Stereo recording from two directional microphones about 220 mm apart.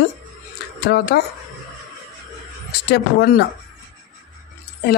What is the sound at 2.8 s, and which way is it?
Speech, 45° left (ahead or behind).